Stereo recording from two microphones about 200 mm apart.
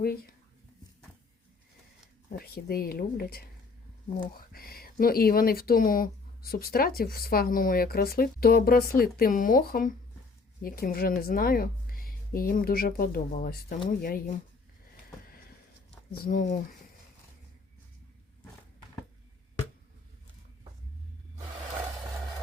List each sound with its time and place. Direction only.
0.0 s speech: 50° left (ahead or behind)
2.3 s speech: 50° left (ahead or behind)
4.5 s speech: 50° left (ahead or behind)
16.2 s speech: 45° left (ahead or behind)